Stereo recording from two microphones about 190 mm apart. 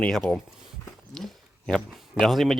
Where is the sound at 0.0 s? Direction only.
5° left (ahead or behind).